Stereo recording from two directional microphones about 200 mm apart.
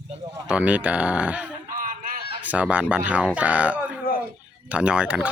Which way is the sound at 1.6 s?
45° right (ahead or behind).